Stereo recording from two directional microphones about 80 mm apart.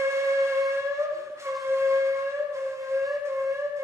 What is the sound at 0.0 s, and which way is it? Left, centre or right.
Music, right.